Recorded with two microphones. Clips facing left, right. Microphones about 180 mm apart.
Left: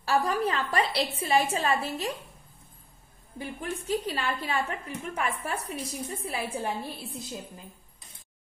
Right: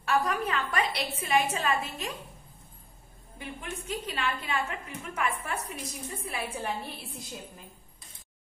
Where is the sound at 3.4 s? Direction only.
35° left (ahead or behind).